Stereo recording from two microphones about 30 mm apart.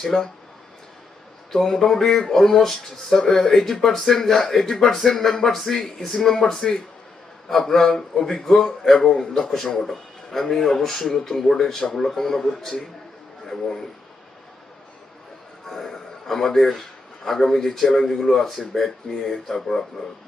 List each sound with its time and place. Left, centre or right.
0.0 s speech: centre
1.8 s speech: centre
15.6 s speech: centre